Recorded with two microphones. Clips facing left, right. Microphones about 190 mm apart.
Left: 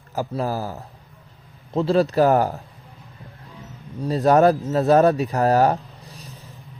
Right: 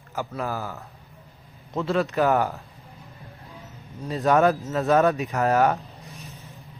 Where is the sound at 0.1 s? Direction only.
35° left (ahead or behind).